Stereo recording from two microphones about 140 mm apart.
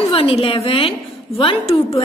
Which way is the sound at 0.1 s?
40° left (ahead or behind).